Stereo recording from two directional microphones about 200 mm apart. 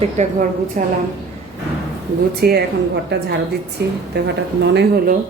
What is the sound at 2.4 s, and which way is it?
Speech, 50° right (ahead or behind).